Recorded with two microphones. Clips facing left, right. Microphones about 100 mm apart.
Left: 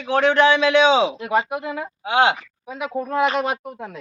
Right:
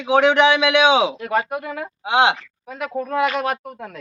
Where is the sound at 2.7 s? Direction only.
5° left (ahead or behind).